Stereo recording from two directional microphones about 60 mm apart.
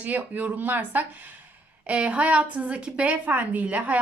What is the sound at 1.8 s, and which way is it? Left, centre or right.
A woman's voice, centre.